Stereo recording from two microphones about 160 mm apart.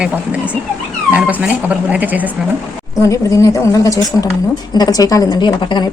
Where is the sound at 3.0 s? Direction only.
20° left (ahead or behind).